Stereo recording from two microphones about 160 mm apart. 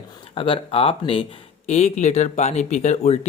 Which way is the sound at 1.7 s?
45° left (ahead or behind).